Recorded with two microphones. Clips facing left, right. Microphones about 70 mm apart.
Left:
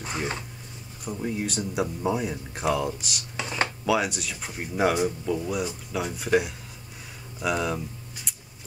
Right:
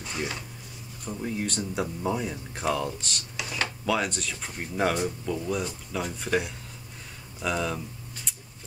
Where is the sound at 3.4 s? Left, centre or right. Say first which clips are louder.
Left 4 dB; left.